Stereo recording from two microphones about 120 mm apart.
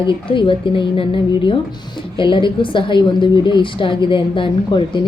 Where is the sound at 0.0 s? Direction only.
45° left (ahead or behind).